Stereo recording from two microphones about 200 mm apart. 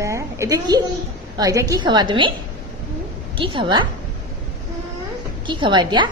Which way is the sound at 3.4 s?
25° right (ahead or behind).